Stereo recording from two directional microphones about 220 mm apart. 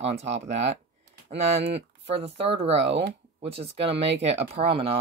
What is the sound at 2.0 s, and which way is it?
Speech, 25° right (ahead or behind).